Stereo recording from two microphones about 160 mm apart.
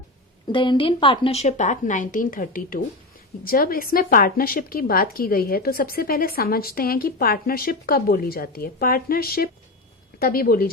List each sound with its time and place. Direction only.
0.4 s a woman's voice: 30° left (ahead or behind); by 10.7 s 65° left (ahead or behind)